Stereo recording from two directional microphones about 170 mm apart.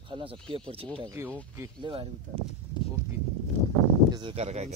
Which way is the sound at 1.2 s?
15° right (ahead or behind).